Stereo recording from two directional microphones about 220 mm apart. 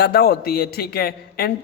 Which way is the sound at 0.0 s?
45° left (ahead or behind).